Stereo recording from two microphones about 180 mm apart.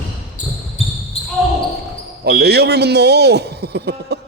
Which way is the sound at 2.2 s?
60° right (ahead or behind).